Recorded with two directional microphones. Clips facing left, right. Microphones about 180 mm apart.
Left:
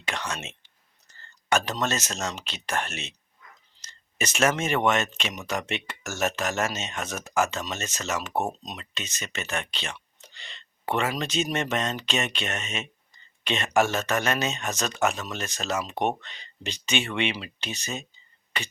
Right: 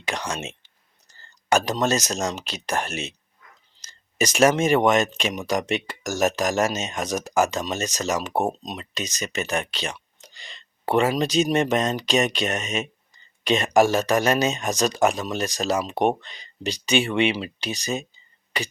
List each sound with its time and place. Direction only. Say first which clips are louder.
0.1 s a sound: right 4 dB; 35° right (ahead or behind)
1.5 s speech: right 5 dB; 35° right (ahead or behind)
4.2 s speech: right 6 dB; 35° right (ahead or behind)